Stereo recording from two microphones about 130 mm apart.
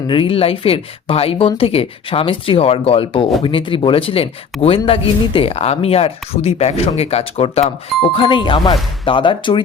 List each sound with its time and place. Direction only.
0.1 s speech: 45° left (ahead or behind)
8.1 s speech: 40° left (ahead or behind)